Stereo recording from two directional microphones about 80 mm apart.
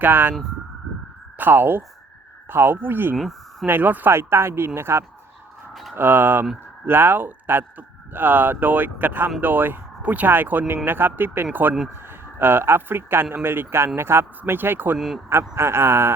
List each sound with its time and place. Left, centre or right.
0.0 s speech: right
1.4 s speech: right
3.2 s speech: centre
3.7 s speech: right
14.9 s speech: centre
15.3 s speech: right